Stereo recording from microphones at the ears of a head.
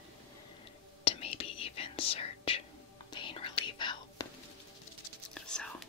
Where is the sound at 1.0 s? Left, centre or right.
Left.